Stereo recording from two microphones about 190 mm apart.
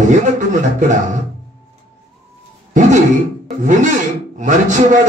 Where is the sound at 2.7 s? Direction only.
40° right (ahead or behind).